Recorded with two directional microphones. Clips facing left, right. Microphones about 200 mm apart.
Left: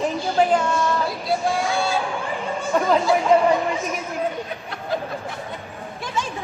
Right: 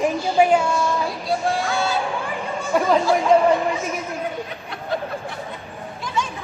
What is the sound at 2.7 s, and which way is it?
Speech, 10° right (ahead or behind).